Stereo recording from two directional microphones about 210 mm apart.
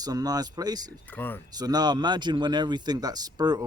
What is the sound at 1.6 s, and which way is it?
Speech, 20° right (ahead or behind).